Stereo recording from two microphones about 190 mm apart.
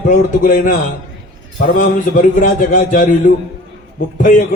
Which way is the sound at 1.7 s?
45° left (ahead or behind).